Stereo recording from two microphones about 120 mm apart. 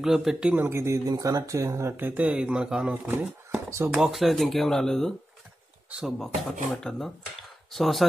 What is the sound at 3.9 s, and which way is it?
Speech, centre (ahead or behind).